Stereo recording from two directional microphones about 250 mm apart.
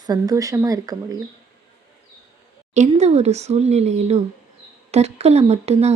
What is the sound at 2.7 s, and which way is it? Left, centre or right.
A woman's voice, right.